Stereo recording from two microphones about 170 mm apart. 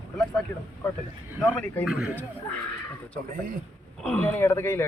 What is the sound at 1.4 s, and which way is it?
Speech, 10° left (ahead or behind).